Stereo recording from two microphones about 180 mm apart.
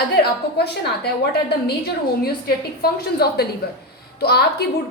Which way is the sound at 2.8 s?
60° left (ahead or behind).